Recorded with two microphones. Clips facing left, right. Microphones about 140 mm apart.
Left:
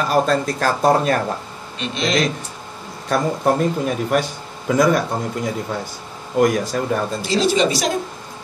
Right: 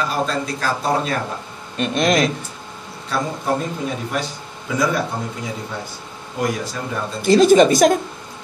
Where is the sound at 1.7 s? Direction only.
50° right (ahead or behind).